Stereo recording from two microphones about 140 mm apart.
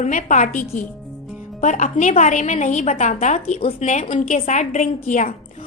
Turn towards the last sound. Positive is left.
turn(degrees=65)  # may be behind; listen again after turning